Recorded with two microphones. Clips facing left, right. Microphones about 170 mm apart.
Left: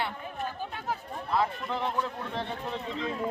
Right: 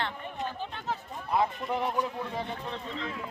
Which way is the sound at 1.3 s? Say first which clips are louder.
Right 1 dB; 15° right (ahead or behind).